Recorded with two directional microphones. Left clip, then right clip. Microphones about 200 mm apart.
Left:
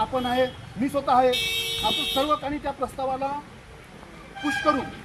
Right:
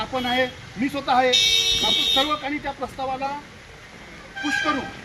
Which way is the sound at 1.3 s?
60° left (ahead or behind).